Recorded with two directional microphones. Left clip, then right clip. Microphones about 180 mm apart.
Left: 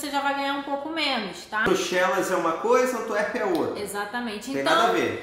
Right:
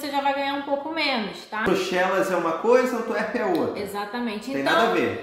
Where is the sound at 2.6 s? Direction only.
5° right (ahead or behind).